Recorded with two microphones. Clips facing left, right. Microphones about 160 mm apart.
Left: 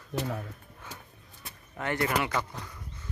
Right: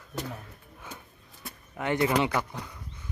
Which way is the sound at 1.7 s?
15° right (ahead or behind).